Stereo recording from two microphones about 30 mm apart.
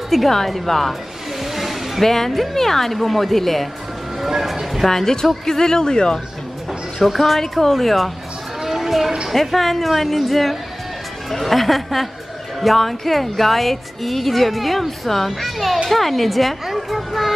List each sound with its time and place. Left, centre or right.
0.1 s music: centre
0.7 s speech: centre
1.4 s a sound: centre
2.0 s speech: centre
4.8 s speech: centre
7.0 s music: centre
8.6 s a sound: centre
9.3 s music: centre